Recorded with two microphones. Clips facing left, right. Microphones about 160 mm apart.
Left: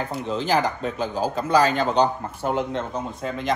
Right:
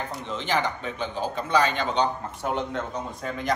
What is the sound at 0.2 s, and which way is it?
A man's voice, 35° left (ahead or behind).